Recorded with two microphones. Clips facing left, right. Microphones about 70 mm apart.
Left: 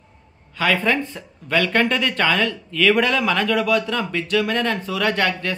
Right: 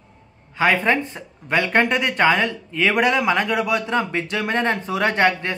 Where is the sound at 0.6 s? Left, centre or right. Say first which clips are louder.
Right 2 dB; right.